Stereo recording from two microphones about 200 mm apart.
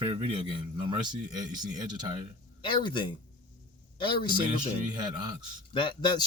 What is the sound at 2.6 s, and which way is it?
Speech, 25° left (ahead or behind).